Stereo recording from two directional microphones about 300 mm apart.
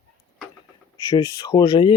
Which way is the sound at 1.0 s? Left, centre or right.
Centre.